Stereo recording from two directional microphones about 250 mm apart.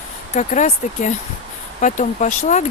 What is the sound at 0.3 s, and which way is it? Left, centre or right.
Speech, left.